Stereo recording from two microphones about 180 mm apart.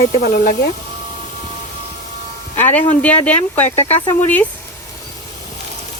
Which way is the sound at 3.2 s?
10° left (ahead or behind).